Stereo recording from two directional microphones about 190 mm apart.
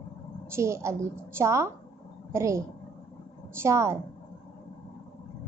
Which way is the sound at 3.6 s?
15° right (ahead or behind).